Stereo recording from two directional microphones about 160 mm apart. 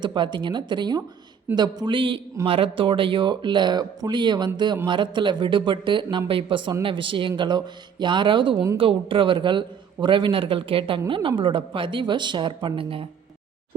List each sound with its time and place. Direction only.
0.0 s a man's voice: 30° right (ahead or behind)